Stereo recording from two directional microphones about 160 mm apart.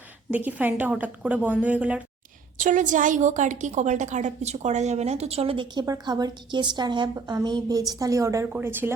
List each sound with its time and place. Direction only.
0.3 s a woman's voice: 10° right (ahead or behind)
2.6 s a woman's voice: 55° right (ahead or behind); by 8.9 s 10° right (ahead or behind)